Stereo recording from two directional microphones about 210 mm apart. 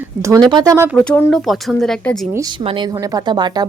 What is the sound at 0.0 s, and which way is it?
Speech, 15° right (ahead or behind).